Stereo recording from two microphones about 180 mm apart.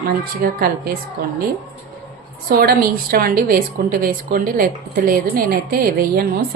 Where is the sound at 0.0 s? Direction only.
55° right (ahead or behind).